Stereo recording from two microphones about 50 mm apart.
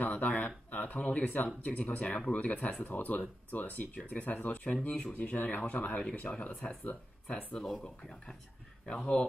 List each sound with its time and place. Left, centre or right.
0.0 s a sound: left
0.7 s speech: left
6.0 s speech: left
7.5 s speech: centre
8.8 s speech: left